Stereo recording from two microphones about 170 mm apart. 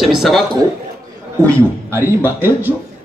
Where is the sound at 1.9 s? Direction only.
15° right (ahead or behind).